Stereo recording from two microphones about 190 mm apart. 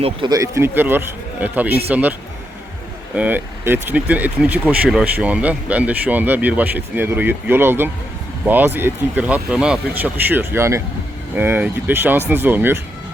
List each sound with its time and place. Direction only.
0.0 s speech: 25° right (ahead or behind)
3.2 s speech: 10° right (ahead or behind)